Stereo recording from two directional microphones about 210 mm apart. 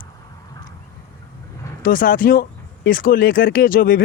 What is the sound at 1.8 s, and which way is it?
Speech, 40° left (ahead or behind).